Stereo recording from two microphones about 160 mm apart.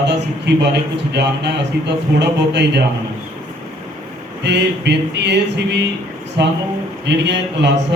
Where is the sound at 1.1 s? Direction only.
90° right.